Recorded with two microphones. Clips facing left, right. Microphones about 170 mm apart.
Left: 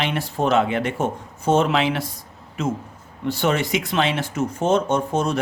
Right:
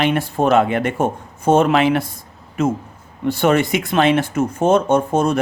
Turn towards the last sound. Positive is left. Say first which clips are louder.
# right 5 dB
turn(degrees=-50)  # may be behind; listen again after turning